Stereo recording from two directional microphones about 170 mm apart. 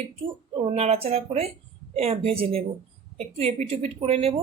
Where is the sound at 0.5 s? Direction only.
35° right (ahead or behind).